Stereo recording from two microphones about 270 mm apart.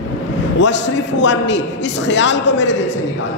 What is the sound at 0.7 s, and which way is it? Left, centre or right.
A man's voice, left.